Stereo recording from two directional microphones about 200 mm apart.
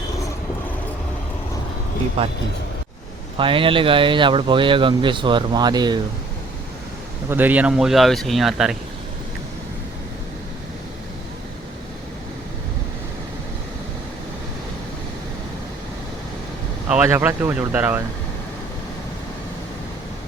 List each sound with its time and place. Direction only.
2.2 s speech: 30° right (ahead or behind)
3.3 s speech: 25° right (ahead or behind)
7.3 s speech: 10° right (ahead or behind)
16.9 s speech: 10° right (ahead or behind)